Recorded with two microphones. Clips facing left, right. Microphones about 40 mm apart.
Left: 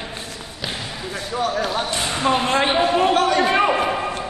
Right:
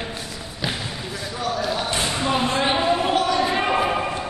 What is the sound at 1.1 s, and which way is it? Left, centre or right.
Basketball bounce, left.